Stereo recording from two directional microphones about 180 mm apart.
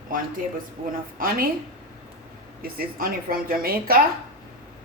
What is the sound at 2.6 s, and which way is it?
Speech, 55° right (ahead or behind).